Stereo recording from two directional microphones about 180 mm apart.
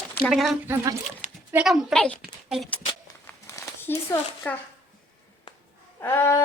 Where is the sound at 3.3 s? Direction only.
15° left (ahead or behind).